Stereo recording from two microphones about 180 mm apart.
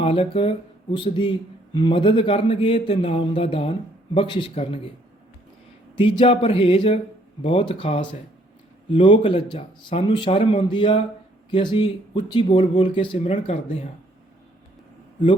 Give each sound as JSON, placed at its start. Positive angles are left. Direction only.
{"t": 0.0, "sound": "a man's voice", "side_deg": 30}
{"t": 6.0, "sound": "a man's voice", "side_deg": 30}